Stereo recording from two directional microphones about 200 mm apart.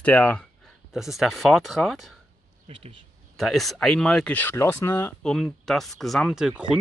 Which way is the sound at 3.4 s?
Centre (ahead or behind).